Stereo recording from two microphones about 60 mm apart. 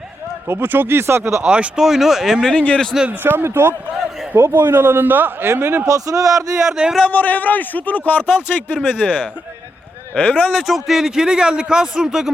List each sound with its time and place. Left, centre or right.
0.4 s speech: right
1.4 s a man's voice: centre
2.5 s a man's voice: centre
3.1 s speech: right
5.8 s a man's voice: right
6.7 s a man's voice: centre
7.0 s a man's voice: left
10.5 s a man's voice: centre